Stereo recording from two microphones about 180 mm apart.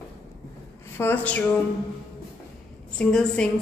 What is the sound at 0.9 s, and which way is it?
Speech, 10° left (ahead or behind).